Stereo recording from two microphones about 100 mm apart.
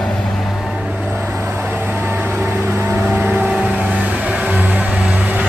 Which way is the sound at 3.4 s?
5° right (ahead or behind).